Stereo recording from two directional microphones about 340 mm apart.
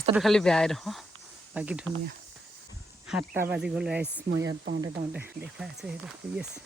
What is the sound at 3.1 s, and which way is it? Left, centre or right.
Speech, centre.